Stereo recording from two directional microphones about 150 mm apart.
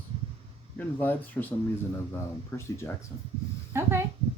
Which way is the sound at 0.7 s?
10° left (ahead or behind).